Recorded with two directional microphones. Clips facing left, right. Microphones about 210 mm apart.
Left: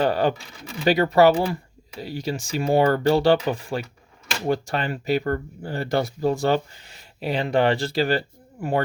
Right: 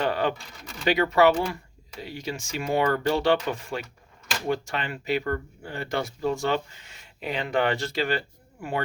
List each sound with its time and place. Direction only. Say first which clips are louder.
0.0 s speech: left 5 dB; 35° left (ahead or behind)